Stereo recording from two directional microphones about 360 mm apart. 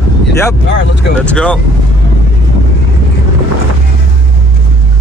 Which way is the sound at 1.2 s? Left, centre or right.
Centre.